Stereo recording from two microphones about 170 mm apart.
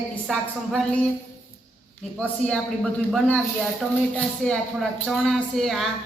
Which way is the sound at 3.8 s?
5° left (ahead or behind).